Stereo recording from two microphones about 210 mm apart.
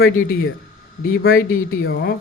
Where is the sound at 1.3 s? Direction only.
45° left (ahead or behind).